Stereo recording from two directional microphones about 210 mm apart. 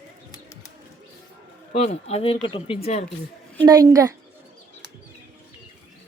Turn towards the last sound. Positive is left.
turn(degrees=-15)  # may be behind; listen again after turning